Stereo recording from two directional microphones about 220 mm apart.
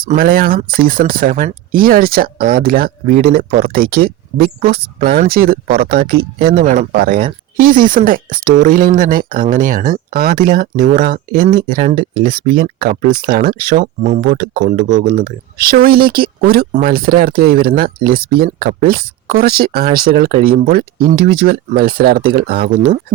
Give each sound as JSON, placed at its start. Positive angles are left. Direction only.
{"t": 0.0, "sound": "speech", "side_deg": -40}